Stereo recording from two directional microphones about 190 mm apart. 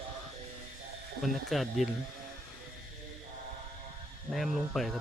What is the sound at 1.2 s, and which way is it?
Speech, centre (ahead or behind).